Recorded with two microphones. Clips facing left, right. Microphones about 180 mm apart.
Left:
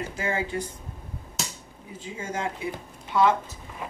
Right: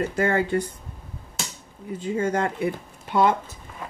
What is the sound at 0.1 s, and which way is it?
Speech, 60° right (ahead or behind).